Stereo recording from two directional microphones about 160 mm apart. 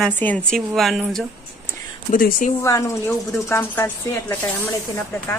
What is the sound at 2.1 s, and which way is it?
Speech, 60° left (ahead or behind).